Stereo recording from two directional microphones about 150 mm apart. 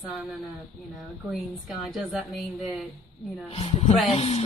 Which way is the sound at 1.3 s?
Centre (ahead or behind).